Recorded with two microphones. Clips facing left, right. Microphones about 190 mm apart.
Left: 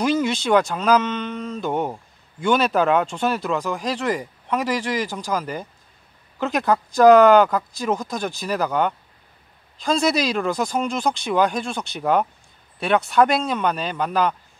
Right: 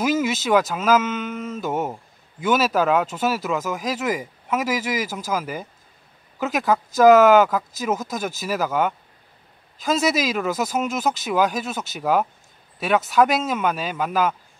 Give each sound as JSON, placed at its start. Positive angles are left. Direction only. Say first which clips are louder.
{"t": 0.0, "sound": "speech", "louder": "left 1 dB", "side_deg": -5}